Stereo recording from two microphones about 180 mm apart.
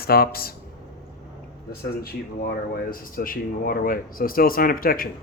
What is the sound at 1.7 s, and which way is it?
Speech, 60° left (ahead or behind).